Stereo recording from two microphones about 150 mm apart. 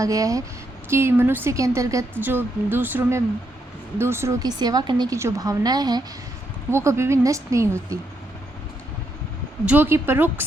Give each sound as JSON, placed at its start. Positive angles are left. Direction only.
{"t": 0.0, "sound": "a woman's voice", "side_deg": -20}
{"t": 9.6, "sound": "a woman's voice", "side_deg": -15}